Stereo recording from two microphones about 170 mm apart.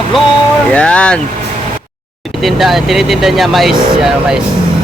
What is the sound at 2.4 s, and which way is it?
Speech, centre (ahead or behind).